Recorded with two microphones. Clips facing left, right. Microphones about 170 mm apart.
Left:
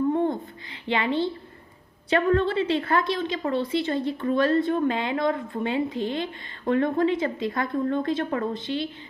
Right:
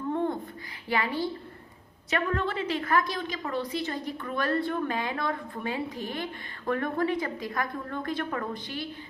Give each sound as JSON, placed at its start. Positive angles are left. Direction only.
{"t": 0.9, "sound": "a woman's voice", "side_deg": 25}